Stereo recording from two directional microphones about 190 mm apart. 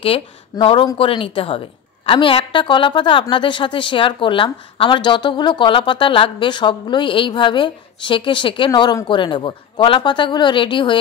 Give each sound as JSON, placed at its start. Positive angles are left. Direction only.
{"t": 0.0, "sound": "a woman's voice", "side_deg": 30}